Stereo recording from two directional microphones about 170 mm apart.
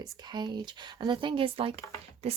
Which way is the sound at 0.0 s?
25° right (ahead or behind).